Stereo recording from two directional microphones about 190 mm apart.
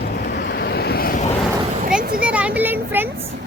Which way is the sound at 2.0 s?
50° right (ahead or behind).